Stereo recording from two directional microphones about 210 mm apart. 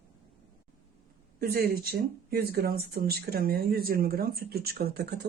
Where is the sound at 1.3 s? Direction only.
45° right (ahead or behind).